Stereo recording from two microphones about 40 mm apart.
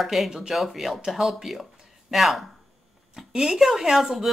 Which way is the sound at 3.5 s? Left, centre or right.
Centre.